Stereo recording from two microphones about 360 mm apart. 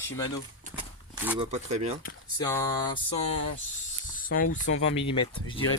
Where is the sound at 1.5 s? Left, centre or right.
Centre.